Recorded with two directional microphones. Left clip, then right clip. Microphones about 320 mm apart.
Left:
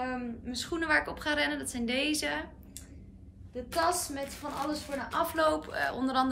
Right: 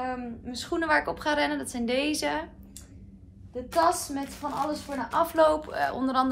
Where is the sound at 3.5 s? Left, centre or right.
Centre.